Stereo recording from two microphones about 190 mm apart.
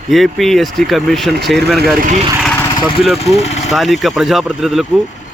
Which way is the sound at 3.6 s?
Centre (ahead or behind).